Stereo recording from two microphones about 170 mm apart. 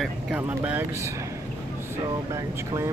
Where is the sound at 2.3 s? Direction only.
15° right (ahead or behind).